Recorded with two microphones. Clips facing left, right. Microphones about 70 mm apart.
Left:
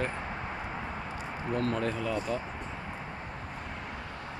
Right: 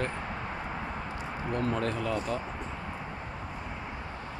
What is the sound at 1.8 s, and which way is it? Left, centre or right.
Speech, centre.